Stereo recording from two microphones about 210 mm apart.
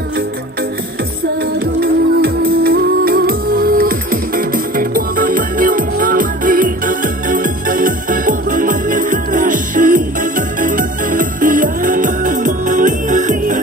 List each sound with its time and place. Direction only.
1.6 s music: 45° right (ahead or behind)